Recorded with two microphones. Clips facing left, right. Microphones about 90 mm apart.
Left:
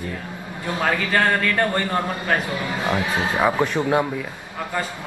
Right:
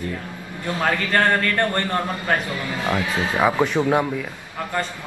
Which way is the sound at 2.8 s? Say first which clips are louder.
Even; 20° left (ahead or behind).